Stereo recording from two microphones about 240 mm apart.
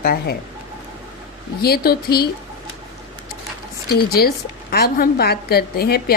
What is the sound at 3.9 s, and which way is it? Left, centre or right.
Speech, left.